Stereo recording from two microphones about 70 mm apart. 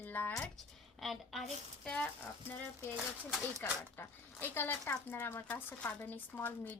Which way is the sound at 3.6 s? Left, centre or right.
Left.